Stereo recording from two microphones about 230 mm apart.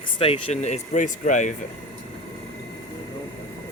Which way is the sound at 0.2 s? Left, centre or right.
Left.